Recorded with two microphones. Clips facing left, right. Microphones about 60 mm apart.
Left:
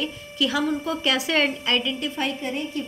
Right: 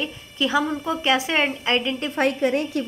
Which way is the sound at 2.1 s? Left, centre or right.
Right.